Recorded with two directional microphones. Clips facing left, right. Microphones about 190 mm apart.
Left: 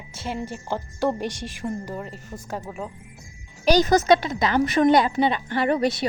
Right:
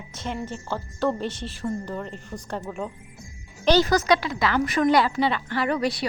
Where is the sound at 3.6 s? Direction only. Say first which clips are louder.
Left 2 dB; 15° left (ahead or behind).